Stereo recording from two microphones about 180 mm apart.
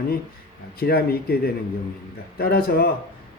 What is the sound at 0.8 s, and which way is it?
A man's voice, 60° left (ahead or behind).